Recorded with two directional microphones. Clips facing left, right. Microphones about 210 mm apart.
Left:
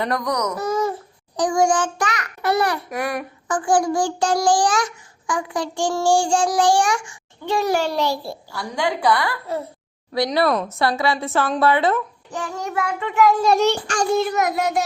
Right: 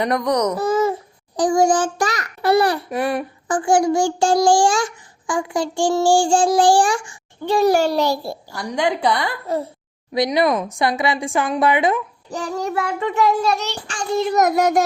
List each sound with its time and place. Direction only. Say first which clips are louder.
0.0 s speech: right 4 dB; 25° right (ahead or behind)
1.4 s child singing: right 2 dB; 35° right (ahead or behind)
8.5 s a woman's voice: right 3 dB; 20° right (ahead or behind)
12.3 s child singing: right 4 dB; 35° right (ahead or behind)
13.6 s child singing: left 10 dB; 50° left (ahead or behind)
14.3 s child singing: right 5 dB; 45° right (ahead or behind)